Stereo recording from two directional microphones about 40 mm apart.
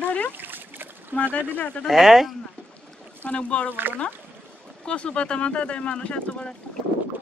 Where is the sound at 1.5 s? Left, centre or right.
Left.